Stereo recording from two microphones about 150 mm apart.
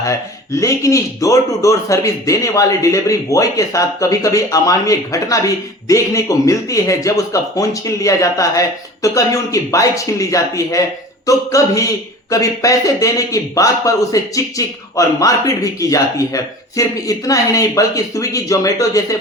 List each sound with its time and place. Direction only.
0.0 s speech: 20° left (ahead or behind)